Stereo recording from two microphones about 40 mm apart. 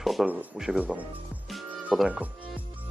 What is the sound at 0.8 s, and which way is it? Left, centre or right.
Speech, right.